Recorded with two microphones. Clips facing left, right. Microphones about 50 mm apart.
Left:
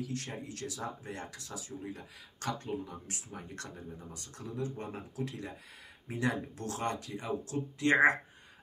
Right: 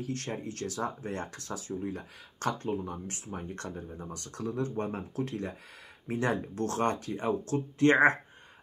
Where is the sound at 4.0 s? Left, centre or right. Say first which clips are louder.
Right 8 dB; right.